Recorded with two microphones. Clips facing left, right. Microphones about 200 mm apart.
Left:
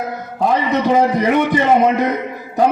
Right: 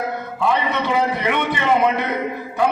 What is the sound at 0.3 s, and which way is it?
A man's voice, 40° left (ahead or behind).